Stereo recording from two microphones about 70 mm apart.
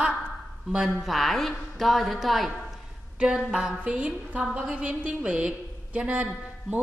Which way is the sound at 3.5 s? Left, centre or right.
Centre.